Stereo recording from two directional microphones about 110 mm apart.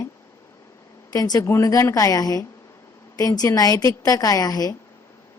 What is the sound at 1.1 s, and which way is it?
A woman's voice, 35° left (ahead or behind).